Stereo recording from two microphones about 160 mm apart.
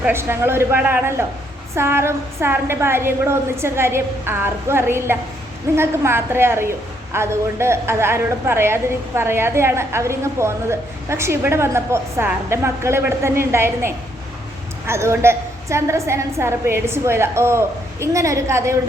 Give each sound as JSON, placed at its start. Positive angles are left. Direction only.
{"t": 0.0, "sound": "a woman's voice", "side_deg": -15}